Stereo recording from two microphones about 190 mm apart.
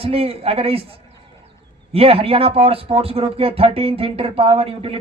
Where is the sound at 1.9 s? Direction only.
30° right (ahead or behind).